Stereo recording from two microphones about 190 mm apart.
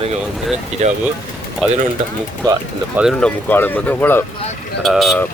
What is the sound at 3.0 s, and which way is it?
Speech, centre (ahead or behind).